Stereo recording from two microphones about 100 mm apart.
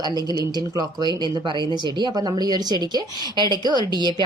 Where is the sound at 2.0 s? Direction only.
45° right (ahead or behind).